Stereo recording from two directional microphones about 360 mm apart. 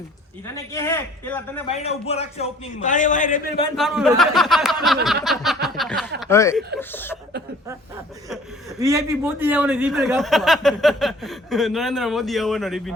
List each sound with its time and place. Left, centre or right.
0.4 s a man's voice: centre
1.7 s a man's voice: centre
3.8 s a man's voice: centre
8.8 s a man's voice: centre